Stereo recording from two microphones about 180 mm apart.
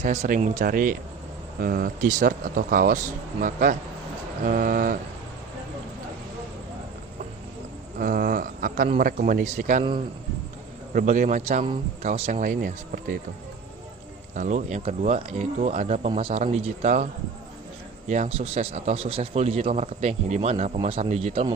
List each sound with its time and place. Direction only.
0.0 s speech: 40° right (ahead or behind)
7.9 s speech: 50° right (ahead or behind)
10.9 s speech: 45° right (ahead or behind)
12.4 s speech: 50° right (ahead or behind)
14.3 s speech: 45° right (ahead or behind)
18.1 s speech: 35° right (ahead or behind)